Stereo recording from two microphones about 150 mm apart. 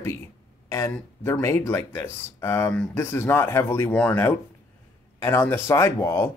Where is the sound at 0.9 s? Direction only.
5° left (ahead or behind).